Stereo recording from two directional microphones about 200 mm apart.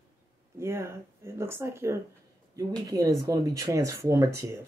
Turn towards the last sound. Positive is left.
turn(degrees=-15)  # may be behind; listen again after turning